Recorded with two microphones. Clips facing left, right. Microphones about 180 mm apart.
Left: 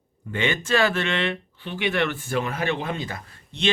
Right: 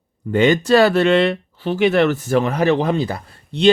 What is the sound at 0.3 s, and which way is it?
Speech, 40° right (ahead or behind).